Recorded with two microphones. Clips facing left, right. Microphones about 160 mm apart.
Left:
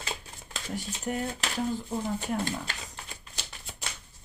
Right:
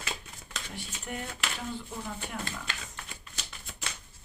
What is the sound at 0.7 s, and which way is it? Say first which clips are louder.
Speech: left 8 dB; 35° left (ahead or behind).